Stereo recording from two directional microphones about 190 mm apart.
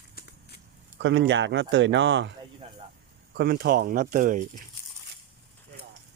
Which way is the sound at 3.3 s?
55° right (ahead or behind).